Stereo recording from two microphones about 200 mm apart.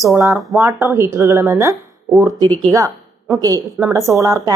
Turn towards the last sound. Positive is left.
turn(degrees=-15)  # may be behind; listen again after turning